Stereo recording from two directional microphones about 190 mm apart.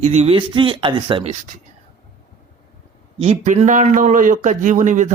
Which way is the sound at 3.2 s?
40° right (ahead or behind).